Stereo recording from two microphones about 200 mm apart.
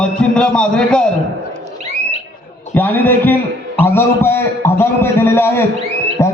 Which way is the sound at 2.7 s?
10° left (ahead or behind).